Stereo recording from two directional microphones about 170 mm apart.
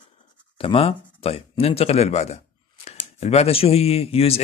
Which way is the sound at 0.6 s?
35° left (ahead or behind).